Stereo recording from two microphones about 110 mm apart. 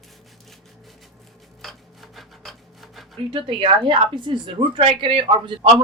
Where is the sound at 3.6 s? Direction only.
50° right (ahead or behind).